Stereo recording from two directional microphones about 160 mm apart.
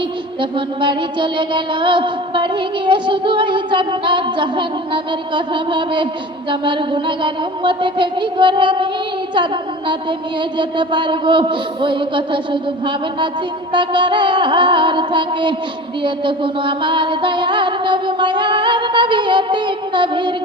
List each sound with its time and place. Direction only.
0.8 s music: 30° right (ahead or behind)
9.3 s a sound: 30° right (ahead or behind)
13.7 s music: 30° right (ahead or behind)